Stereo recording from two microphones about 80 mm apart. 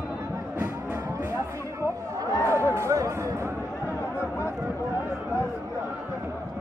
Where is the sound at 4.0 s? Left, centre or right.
Left.